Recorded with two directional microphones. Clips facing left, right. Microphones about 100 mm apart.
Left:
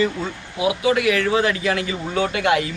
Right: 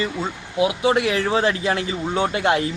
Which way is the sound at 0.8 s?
30° right (ahead or behind).